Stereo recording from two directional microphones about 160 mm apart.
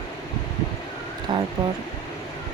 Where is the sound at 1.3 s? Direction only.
30° right (ahead or behind).